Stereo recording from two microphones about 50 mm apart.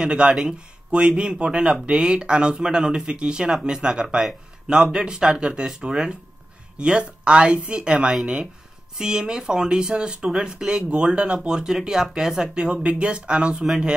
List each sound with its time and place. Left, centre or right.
0.0 s speech: centre